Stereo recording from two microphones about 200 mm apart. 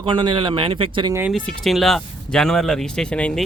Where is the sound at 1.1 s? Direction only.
10° right (ahead or behind).